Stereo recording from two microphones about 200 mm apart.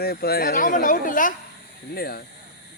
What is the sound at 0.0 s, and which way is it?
Speech, 50° left (ahead or behind).